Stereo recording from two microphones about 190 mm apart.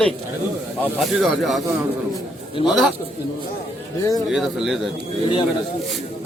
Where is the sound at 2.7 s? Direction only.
Centre (ahead or behind).